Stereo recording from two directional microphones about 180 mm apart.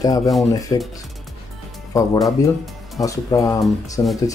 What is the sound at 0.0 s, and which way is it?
Speech, 20° left (ahead or behind).